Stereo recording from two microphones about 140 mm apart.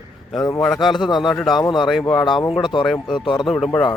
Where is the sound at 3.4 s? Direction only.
Centre (ahead or behind).